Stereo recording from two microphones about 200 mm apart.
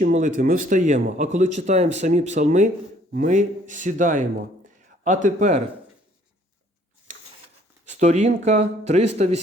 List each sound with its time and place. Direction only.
0.0 s speech: 40° right (ahead or behind)
7.9 s speech: 35° right (ahead or behind)